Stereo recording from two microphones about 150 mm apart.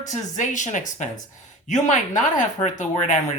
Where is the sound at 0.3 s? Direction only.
55° left (ahead or behind).